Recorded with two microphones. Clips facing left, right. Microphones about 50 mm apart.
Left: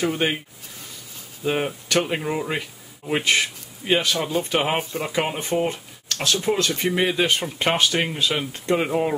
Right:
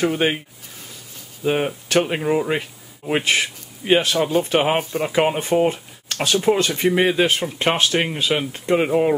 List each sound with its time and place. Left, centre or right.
0.0 s speech: centre
1.4 s speech: centre